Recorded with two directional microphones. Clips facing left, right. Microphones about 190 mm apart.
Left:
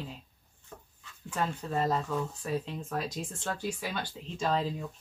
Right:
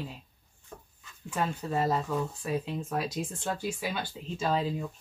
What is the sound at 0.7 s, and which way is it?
Dog, 15° right (ahead or behind).